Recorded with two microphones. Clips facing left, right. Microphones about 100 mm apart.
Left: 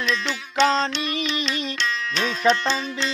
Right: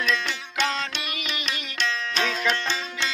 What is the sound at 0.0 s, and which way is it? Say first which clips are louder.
Music: left 1 dB; 30° left (ahead or behind).